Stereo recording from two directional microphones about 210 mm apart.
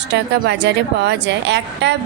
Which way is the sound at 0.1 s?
55° right (ahead or behind).